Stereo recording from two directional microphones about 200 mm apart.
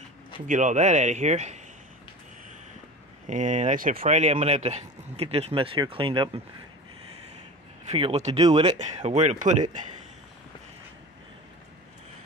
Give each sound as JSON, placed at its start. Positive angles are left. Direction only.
{"t": 0.5, "sound": "speech", "side_deg": -40}
{"t": 3.3, "sound": "speech", "side_deg": -35}
{"t": 7.9, "sound": "speech", "side_deg": -30}
{"t": 8.7, "sound": "speech", "side_deg": -35}